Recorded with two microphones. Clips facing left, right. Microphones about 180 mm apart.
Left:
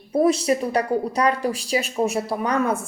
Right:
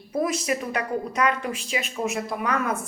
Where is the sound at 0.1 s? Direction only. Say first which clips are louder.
Left 6 dB; 30° left (ahead or behind).